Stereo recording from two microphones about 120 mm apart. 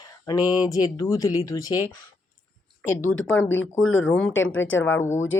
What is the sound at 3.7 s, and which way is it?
Speech, 10° left (ahead or behind).